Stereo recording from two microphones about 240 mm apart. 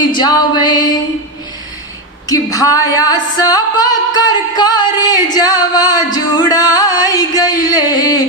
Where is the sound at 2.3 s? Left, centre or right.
Centre.